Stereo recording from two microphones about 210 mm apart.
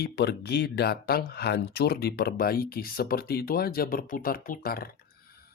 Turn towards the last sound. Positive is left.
turn(degrees=45)  # may be behind; listen again after turning